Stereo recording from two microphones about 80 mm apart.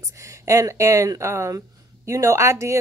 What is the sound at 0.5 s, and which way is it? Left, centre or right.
A woman's voice, right.